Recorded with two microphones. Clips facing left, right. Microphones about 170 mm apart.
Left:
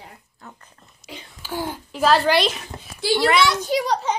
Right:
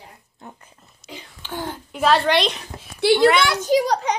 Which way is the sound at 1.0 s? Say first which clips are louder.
Left 1 dB; 5° left (ahead or behind).